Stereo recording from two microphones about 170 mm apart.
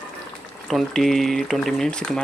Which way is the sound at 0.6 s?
Centre (ahead or behind).